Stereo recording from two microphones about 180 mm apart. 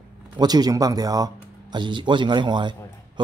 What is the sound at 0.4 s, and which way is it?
Speech, 20° right (ahead or behind).